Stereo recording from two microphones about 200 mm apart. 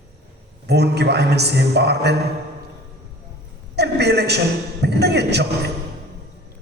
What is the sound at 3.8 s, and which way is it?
A woman's voice, 55° right (ahead or behind).